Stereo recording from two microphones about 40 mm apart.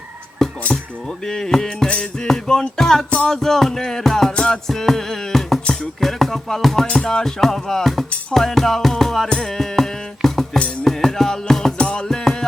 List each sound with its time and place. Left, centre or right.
0.4 s dishes: centre
1.2 s music: centre
11.8 s music: left
12.0 s music: centre